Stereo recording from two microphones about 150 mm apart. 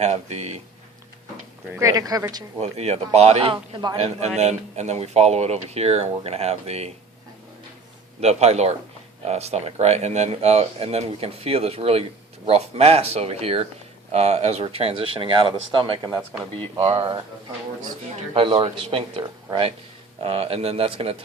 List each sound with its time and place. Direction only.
0.0 s speech: 50° right (ahead or behind)
1.8 s speech: 25° right (ahead or behind)
2.6 s speech: 45° right (ahead or behind)
3.9 s speech: 45° right (ahead or behind)
8.2 s speech: 45° right (ahead or behind)
18.5 s speech: 40° right (ahead or behind)
20.2 s speech: 40° right (ahead or behind)